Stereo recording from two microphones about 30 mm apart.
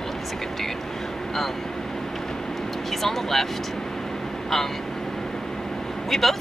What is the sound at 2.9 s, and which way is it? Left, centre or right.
Speech, centre.